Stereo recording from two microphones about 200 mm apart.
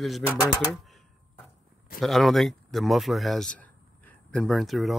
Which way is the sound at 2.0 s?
Centre (ahead or behind).